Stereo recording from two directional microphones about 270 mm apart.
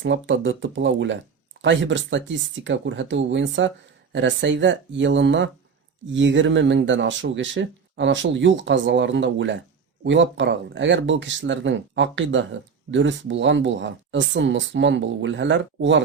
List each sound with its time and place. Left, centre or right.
0.0 s speech: right